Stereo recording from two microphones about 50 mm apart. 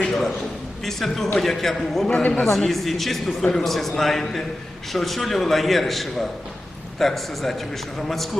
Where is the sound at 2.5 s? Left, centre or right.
Centre.